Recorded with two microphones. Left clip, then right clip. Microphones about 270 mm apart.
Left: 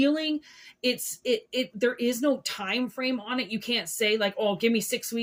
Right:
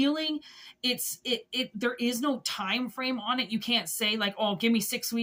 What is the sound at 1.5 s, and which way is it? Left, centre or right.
Speech, centre.